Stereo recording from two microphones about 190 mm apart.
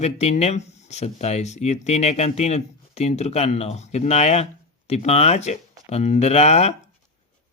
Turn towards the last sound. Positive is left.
turn(degrees=35)  # may be behind; listen again after turning